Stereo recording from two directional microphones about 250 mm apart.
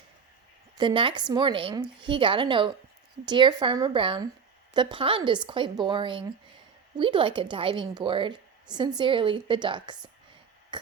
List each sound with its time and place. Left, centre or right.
0.8 s a woman's voice: centre